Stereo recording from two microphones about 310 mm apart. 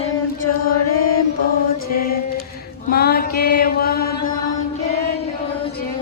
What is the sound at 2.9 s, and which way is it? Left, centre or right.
Mantra, left.